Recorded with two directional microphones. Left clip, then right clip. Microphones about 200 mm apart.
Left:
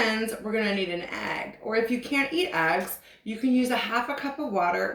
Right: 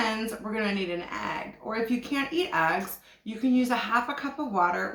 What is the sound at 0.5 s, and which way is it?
Speech, 30° right (ahead or behind).